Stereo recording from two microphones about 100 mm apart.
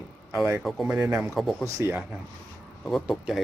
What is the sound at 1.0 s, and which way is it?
Speech, 10° right (ahead or behind).